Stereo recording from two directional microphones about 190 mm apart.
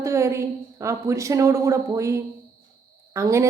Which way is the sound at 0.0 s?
15° right (ahead or behind).